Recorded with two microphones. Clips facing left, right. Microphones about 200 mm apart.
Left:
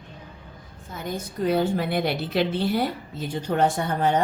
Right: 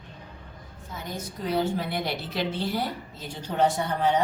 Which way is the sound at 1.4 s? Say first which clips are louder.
Left 4 dB; 55° left (ahead or behind).